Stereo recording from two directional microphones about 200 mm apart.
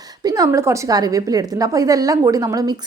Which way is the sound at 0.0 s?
20° right (ahead or behind).